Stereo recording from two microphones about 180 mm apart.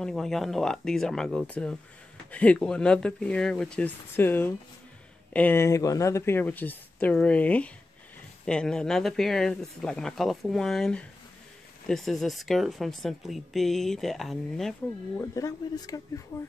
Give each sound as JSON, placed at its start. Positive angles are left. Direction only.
{"t": 0.0, "sound": "speech", "side_deg": 0}
{"t": 15.1, "sound": "speech", "side_deg": 20}